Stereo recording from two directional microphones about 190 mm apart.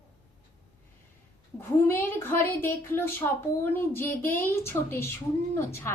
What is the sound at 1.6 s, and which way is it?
A woman's voice, 10° left (ahead or behind).